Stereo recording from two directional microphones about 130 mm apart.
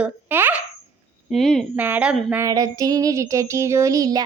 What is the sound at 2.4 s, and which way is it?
A woman's voice, 25° right (ahead or behind).